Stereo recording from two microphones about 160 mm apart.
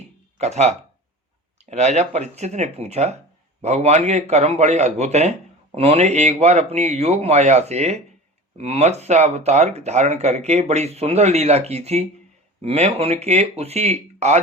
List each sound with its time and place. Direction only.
0.3 s speech: 45° right (ahead or behind)
1.7 s a man's voice: 45° right (ahead or behind)